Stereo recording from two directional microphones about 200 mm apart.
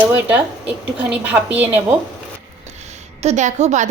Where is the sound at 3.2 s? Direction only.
35° right (ahead or behind).